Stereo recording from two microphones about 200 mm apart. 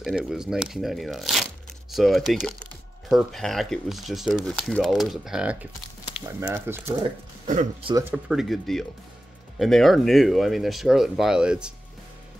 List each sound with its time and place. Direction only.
0.0 s speech: centre (ahead or behind)
8.1 s speech: centre (ahead or behind)